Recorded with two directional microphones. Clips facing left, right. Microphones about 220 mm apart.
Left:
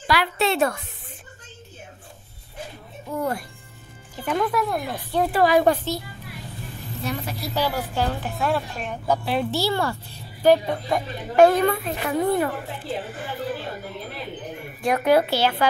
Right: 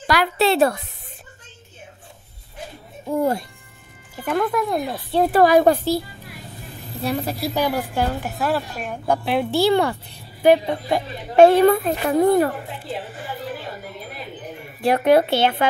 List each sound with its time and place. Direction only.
0.0 s a woman's voice: 45° right (ahead or behind)
3.1 s a woman's voice: 25° right (ahead or behind)
4.2 s speech: 5° right (ahead or behind)
4.6 s a woman's voice: 20° right (ahead or behind)
5.2 s a woman's voice: 40° right (ahead or behind)
7.5 s a woman's voice: 15° right (ahead or behind)
11.7 s a woman's voice: 40° right (ahead or behind)
14.8 s a woman's voice: 35° right (ahead or behind)